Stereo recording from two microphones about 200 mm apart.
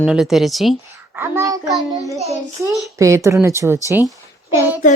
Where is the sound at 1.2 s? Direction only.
15° right (ahead or behind).